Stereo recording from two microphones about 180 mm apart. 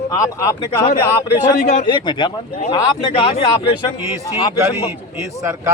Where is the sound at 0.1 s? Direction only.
20° left (ahead or behind).